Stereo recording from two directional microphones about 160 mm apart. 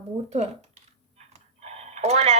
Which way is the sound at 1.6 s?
40° right (ahead or behind).